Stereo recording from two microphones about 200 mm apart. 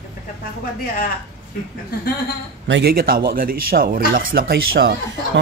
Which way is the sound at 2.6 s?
55° right (ahead or behind).